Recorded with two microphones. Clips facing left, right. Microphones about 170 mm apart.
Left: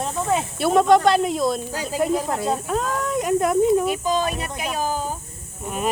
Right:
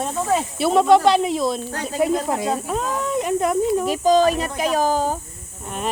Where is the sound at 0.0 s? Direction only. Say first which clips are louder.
Right 1 dB; centre (ahead or behind).